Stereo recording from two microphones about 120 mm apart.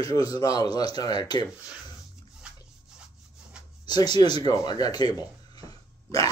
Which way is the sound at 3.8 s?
35° left (ahead or behind).